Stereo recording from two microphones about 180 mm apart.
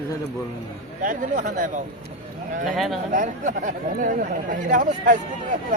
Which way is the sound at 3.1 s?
45° right (ahead or behind).